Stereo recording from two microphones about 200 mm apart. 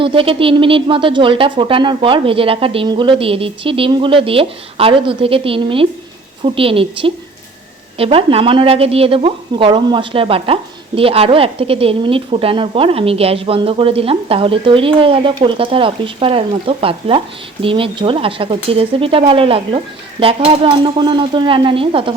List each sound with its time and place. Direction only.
0.0 s a woman's voice: 25° right (ahead or behind)